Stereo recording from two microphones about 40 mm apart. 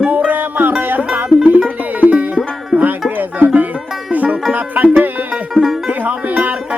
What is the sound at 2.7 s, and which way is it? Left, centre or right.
Music, left.